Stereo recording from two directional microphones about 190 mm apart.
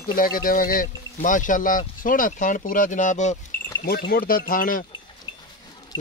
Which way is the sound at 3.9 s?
55° left (ahead or behind).